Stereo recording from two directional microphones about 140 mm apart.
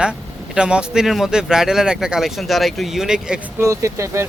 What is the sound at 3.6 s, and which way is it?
Speech, 20° right (ahead or behind).